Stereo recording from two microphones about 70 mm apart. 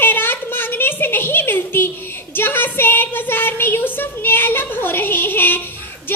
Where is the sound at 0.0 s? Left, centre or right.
Left.